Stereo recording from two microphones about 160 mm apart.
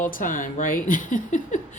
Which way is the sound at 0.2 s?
55° left (ahead or behind).